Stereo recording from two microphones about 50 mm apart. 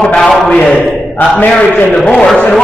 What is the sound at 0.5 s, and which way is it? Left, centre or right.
Speech, left.